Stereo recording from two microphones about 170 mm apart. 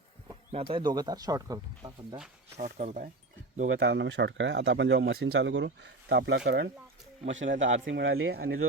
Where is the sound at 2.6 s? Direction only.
50° right (ahead or behind).